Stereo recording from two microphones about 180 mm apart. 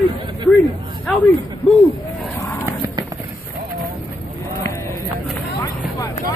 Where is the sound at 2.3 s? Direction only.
15° left (ahead or behind).